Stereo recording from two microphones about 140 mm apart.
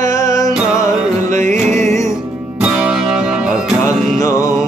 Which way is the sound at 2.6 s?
5° right (ahead or behind).